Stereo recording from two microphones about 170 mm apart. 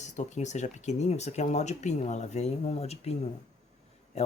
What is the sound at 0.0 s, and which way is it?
Speech, 45° left (ahead or behind).